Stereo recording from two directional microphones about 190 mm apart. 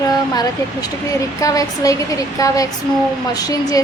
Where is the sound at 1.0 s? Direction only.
15° left (ahead or behind).